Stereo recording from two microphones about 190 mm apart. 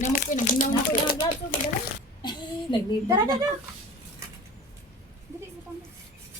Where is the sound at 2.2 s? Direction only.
25° left (ahead or behind).